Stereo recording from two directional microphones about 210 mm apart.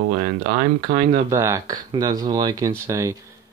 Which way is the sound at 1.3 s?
10° right (ahead or behind).